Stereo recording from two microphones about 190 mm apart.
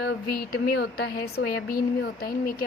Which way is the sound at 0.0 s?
55° left (ahead or behind).